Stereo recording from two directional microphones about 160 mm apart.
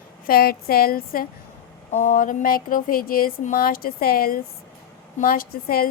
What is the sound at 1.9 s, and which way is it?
A woman's voice, 50° left (ahead or behind).